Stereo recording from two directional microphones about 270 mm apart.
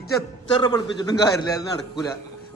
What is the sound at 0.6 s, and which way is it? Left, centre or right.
Speech, centre.